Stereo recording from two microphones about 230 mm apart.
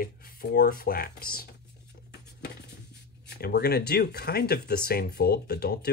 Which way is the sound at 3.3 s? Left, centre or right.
Left.